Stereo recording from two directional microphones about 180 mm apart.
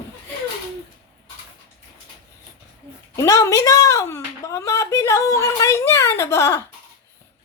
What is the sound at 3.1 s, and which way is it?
Speech, 20° left (ahead or behind).